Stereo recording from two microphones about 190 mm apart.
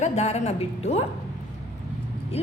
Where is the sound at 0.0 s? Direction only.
35° left (ahead or behind).